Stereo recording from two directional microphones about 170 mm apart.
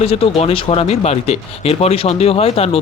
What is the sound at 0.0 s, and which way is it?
Speech, 35° left (ahead or behind).